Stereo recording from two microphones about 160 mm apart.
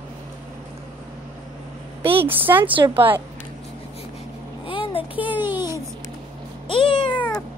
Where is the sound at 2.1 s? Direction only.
10° right (ahead or behind).